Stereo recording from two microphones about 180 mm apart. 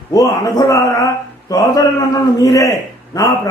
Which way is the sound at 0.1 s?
20° left (ahead or behind).